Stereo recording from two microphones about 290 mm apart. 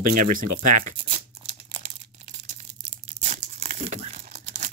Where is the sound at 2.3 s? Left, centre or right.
Right.